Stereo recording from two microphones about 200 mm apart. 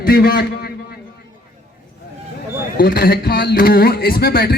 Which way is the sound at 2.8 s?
45° left (ahead or behind).